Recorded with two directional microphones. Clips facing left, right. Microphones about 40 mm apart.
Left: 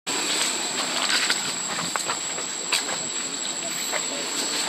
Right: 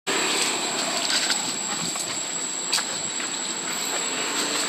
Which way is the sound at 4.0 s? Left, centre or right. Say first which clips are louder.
Right 3 dB; right.